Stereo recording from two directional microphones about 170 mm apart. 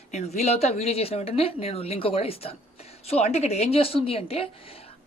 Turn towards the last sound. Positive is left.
turn(degrees=35)  # may be behind; listen again after turning